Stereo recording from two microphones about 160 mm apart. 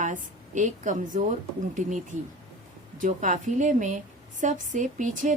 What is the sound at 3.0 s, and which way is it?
A woman's voice, 50° right (ahead or behind).